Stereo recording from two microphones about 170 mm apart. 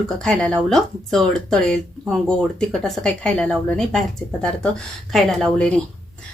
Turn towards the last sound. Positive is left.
turn(degrees=5)  # may be behind; listen again after turning